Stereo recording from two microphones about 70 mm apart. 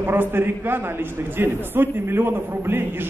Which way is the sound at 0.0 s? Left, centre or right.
Right.